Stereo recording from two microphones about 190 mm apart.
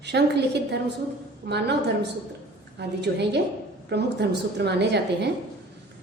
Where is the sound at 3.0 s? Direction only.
60° right (ahead or behind).